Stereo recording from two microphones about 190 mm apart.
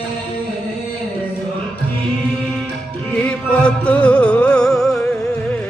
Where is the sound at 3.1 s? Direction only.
5° left (ahead or behind).